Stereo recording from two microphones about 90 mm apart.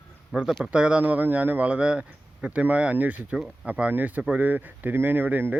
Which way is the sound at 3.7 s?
15° right (ahead or behind).